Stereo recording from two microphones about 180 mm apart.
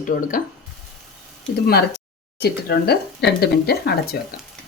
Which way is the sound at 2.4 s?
65° left (ahead or behind).